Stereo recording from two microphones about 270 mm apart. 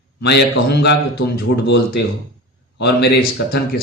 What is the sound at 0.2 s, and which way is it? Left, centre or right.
Speech, left.